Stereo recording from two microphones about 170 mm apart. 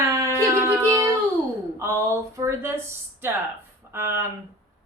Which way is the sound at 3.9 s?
15° right (ahead or behind).